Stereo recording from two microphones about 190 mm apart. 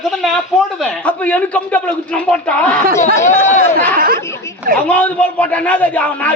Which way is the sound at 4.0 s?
50° right (ahead or behind).